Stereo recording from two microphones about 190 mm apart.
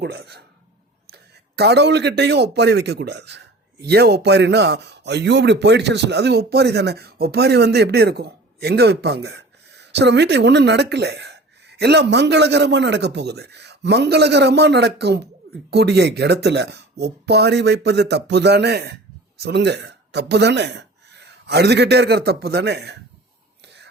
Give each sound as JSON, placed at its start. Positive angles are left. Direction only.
{"t": 0.0, "sound": "a man's voice", "side_deg": -60}